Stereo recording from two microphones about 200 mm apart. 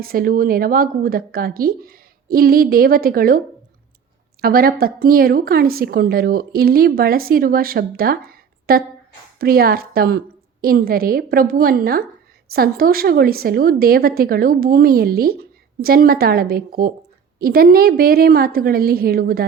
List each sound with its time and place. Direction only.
0.0 s a woman's voice: 45° right (ahead or behind)